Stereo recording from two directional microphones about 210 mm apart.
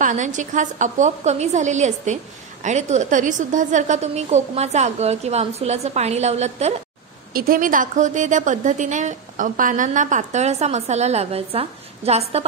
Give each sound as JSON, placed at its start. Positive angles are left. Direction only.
{"t": 0.0, "sound": "a woman's voice", "side_deg": -35}
{"t": 7.3, "sound": "a woman's voice", "side_deg": -45}